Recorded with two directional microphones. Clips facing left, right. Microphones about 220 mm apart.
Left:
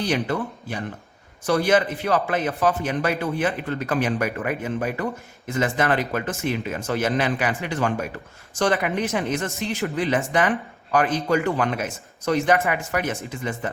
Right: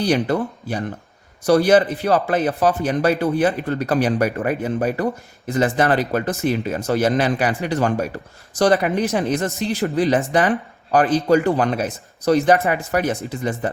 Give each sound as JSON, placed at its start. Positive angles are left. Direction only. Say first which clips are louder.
{"t": 0.0, "sound": "speech", "louder": "right 5 dB", "side_deg": -35}